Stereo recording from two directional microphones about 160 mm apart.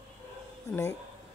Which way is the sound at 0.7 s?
15° left (ahead or behind).